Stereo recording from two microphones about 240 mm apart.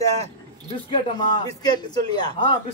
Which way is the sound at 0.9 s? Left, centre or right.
Centre.